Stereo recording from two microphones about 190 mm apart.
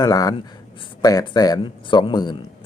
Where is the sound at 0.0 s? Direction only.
20° left (ahead or behind).